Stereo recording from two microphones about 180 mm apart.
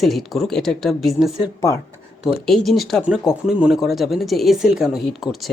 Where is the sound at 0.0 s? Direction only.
Centre (ahead or behind).